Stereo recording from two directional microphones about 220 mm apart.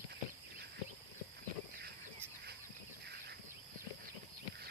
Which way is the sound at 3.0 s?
50° right (ahead or behind).